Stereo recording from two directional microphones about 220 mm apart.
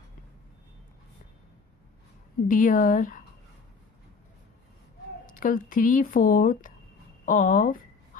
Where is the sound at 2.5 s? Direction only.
35° left (ahead or behind).